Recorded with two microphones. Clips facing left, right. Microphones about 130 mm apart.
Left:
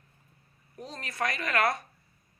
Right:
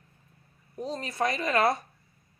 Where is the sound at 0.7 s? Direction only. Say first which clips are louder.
Right 5 dB; 30° right (ahead or behind).